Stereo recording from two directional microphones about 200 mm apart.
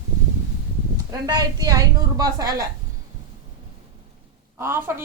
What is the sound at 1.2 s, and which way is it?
A woman's voice, 20° right (ahead or behind).